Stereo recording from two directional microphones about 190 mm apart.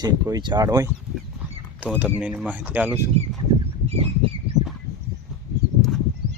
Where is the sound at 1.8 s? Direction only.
10° right (ahead or behind).